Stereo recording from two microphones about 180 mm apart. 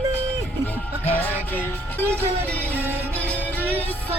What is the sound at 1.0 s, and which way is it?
Music, 10° left (ahead or behind).